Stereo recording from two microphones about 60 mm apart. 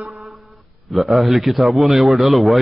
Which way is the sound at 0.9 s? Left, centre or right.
Centre.